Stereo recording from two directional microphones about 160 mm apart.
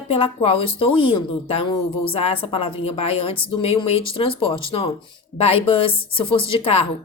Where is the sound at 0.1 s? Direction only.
35° left (ahead or behind).